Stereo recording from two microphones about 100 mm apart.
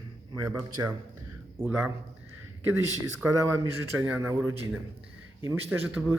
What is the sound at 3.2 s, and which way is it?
Speech, 30° right (ahead or behind).